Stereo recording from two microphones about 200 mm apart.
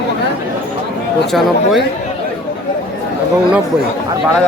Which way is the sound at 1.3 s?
Centre (ahead or behind).